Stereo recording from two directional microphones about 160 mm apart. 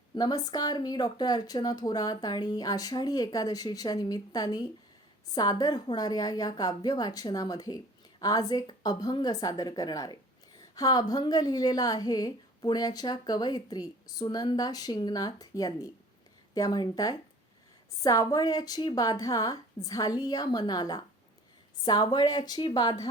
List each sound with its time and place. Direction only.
0.2 s a woman's voice: 25° left (ahead or behind)